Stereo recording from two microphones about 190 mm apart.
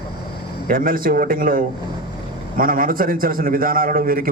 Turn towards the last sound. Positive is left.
turn(degrees=-50)  # may be behind; listen again after turning